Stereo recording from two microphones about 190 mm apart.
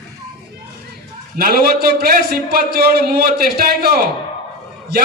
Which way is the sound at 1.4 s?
50° right (ahead or behind).